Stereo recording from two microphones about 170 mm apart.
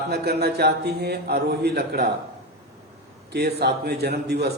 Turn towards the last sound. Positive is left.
turn(degrees=-75)  # may be behind; listen again after turning